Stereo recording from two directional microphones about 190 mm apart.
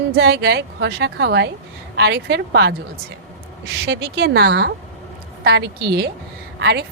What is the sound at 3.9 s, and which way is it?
A woman's voice, 60° right (ahead or behind).